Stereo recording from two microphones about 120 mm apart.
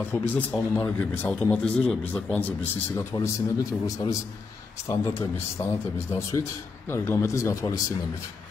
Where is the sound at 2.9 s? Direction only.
25° left (ahead or behind).